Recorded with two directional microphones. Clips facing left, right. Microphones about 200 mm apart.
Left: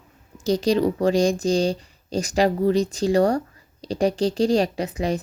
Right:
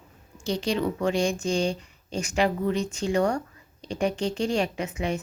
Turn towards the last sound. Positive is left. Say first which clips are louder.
# left 4 dB
turn(degrees=35)  # may be behind; listen again after turning